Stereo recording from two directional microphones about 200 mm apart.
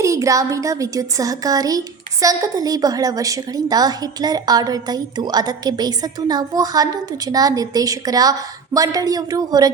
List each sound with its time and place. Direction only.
0.0 s a woman's voice: 15° right (ahead or behind)